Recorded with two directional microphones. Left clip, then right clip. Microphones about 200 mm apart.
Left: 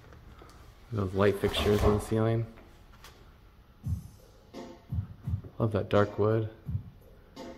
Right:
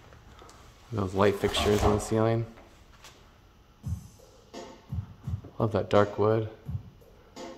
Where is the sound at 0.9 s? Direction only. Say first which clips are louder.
Right 2 dB; 15° right (ahead or behind).